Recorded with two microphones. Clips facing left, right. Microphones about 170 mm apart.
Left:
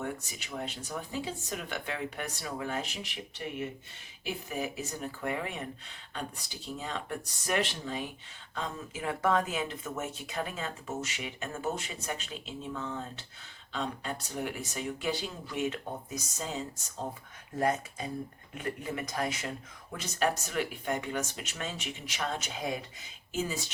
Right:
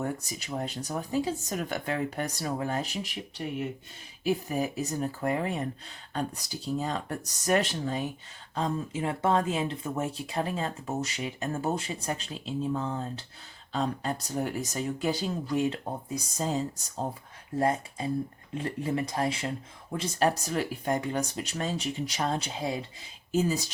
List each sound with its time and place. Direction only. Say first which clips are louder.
0.0 s speech: right 4 dB; 40° right (ahead or behind)
4.2 s speech: right 7 dB; 40° right (ahead or behind)
8.5 s speech: right 7 dB; 30° right (ahead or behind)